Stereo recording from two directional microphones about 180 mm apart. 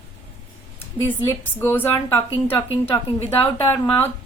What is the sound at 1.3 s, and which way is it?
Speech, 15° left (ahead or behind).